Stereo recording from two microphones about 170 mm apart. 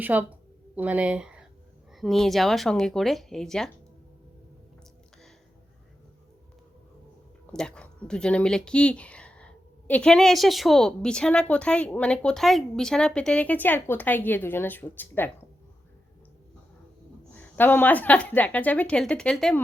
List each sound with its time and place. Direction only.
0.0 s speech: 10° right (ahead or behind)
7.5 s speech: 5° left (ahead or behind)
17.3 s speech: 10° left (ahead or behind)